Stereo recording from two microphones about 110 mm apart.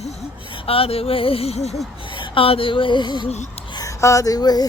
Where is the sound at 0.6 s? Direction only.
60° left (ahead or behind).